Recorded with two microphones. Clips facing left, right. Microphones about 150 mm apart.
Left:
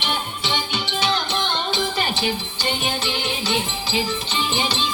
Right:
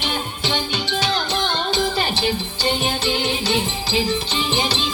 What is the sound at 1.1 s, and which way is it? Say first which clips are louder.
Music: right 1 dB; 40° right (ahead or behind).